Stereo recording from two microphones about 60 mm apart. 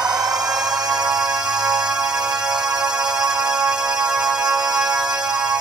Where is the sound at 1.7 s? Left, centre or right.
Centre.